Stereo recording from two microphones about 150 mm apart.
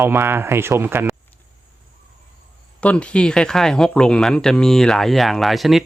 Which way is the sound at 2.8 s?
10° left (ahead or behind).